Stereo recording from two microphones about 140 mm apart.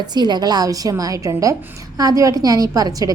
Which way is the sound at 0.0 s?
30° right (ahead or behind).